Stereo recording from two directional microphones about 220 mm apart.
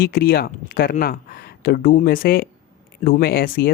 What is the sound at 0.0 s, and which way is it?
Speech, 45° left (ahead or behind).